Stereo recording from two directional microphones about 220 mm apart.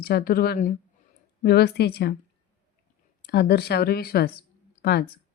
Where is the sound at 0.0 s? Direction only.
45° left (ahead or behind).